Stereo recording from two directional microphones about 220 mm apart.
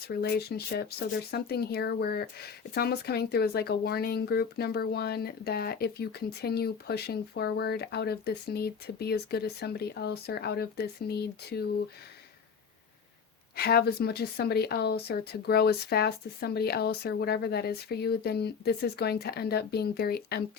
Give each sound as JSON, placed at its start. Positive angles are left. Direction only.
{"t": 0.0, "sound": "speech", "side_deg": 45}
{"t": 13.6, "sound": "speech", "side_deg": 45}